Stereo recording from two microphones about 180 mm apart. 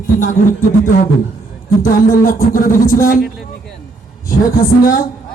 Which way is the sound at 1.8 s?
50° left (ahead or behind).